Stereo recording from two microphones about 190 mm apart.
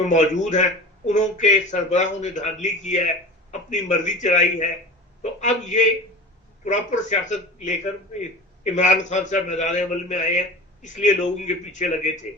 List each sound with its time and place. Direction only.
0.0 s a man's voice: 40° left (ahead or behind)